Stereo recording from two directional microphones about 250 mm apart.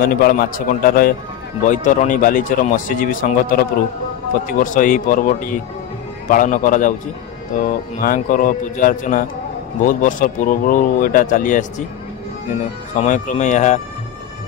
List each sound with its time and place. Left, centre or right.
0.0 s speech: left
8.0 s speech: left
12.9 s speech: left